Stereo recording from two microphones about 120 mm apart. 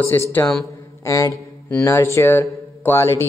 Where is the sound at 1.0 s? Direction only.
25° left (ahead or behind).